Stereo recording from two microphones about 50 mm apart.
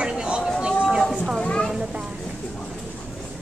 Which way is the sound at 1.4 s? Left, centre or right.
Centre.